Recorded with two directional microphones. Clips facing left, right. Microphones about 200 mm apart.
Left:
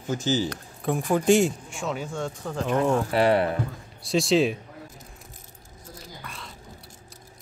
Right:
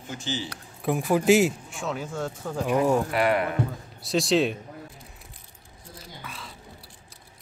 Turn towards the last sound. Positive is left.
turn(degrees=0)  # may be behind; listen again after turning